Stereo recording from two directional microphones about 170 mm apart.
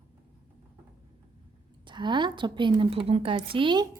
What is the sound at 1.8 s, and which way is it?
A woman's voice, 25° right (ahead or behind).